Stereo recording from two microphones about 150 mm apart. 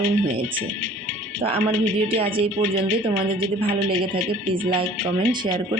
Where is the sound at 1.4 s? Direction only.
40° right (ahead or behind).